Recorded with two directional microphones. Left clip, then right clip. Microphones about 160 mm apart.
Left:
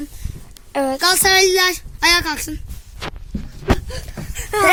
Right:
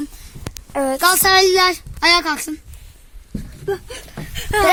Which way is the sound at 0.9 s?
50° right (ahead or behind).